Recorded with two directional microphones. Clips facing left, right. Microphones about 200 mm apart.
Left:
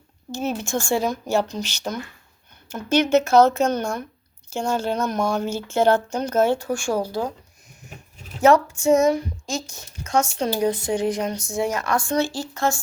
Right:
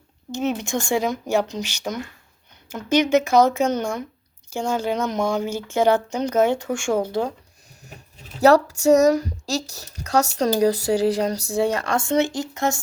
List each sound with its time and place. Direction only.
0.3 s speech: 20° right (ahead or behind)
8.4 s speech: 35° right (ahead or behind); by 12.8 s 20° right (ahead or behind)